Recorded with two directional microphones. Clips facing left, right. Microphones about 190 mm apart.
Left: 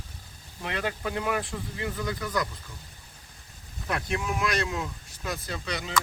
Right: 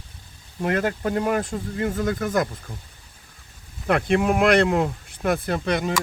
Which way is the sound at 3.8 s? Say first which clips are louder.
Right 10 dB; 60° right (ahead or behind).